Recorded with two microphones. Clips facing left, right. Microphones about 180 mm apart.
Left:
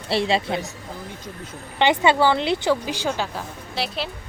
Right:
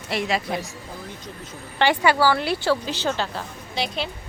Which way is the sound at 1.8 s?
20° left (ahead or behind).